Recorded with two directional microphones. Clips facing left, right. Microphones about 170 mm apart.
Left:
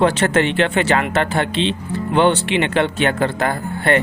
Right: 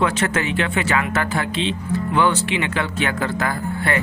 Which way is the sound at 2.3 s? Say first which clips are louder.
Left 4 dB; 65° left (ahead or behind).